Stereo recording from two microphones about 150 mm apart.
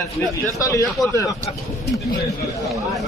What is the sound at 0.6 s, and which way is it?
Speech, 20° left (ahead or behind).